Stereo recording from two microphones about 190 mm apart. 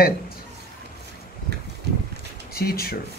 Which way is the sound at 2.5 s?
55° left (ahead or behind).